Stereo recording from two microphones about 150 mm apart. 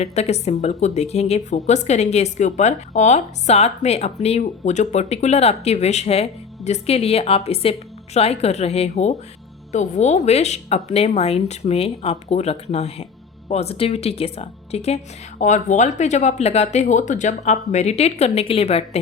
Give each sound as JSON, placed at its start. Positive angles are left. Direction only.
{"t": 0.0, "sound": "a woman's voice", "side_deg": 45}